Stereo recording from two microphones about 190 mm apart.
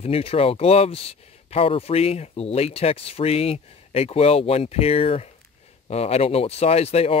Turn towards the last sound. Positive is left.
turn(degrees=35)  # may be behind; listen again after turning